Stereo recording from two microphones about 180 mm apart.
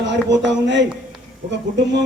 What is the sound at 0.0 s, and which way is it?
Speech, 80° right.